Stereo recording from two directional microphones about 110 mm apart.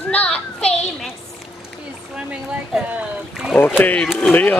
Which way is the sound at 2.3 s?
10° right (ahead or behind).